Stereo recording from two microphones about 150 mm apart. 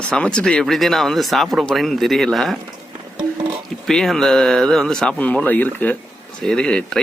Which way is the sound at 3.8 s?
5° left (ahead or behind).